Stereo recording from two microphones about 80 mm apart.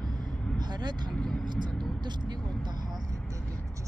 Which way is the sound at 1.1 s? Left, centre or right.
Centre.